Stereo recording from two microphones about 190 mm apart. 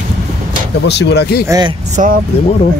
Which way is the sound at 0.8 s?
60° left (ahead or behind).